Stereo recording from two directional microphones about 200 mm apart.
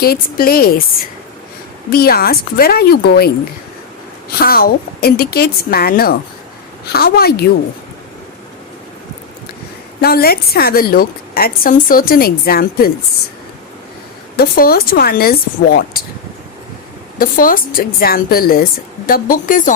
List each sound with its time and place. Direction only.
0.0 s a woman's voice: 50° left (ahead or behind)
1.9 s a woman's voice: 50° left (ahead or behind)
10.0 s a woman's voice: 50° left (ahead or behind)
14.3 s a woman's voice: 50° left (ahead or behind)
17.2 s a woman's voice: 45° left (ahead or behind)